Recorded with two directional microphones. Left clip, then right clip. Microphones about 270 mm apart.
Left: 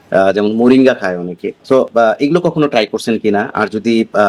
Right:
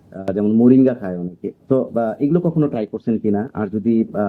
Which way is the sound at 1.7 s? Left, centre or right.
Left.